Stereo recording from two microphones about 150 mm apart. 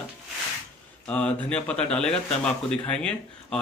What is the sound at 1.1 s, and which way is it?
Speech, 5° left (ahead or behind).